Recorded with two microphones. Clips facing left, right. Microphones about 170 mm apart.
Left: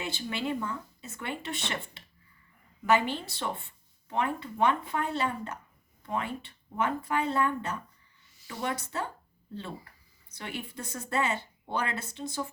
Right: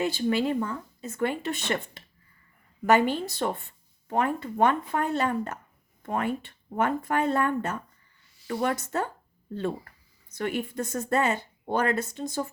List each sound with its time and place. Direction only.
0.0 s speech: 45° right (ahead or behind)
10.3 s speech: 50° right (ahead or behind)